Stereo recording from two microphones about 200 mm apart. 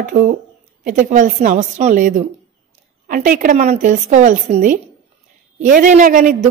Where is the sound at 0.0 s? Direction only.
40° right (ahead or behind).